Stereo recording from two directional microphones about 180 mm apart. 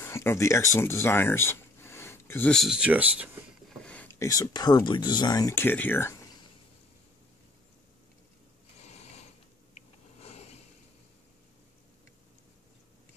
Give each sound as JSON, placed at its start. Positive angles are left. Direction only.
{"t": 0.0, "sound": "speech", "side_deg": 15}
{"t": 3.8, "sound": "speech", "side_deg": 10}
{"t": 8.7, "sound": "mechanisms", "side_deg": 35}
{"t": 10.2, "sound": "a sound", "side_deg": 35}